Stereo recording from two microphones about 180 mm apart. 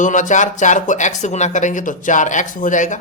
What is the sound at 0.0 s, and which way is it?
A man's voice, 45° left (ahead or behind).